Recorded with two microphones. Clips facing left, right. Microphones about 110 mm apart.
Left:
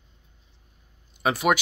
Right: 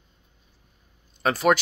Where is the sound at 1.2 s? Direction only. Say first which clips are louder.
Right 2 dB; 10° left (ahead or behind).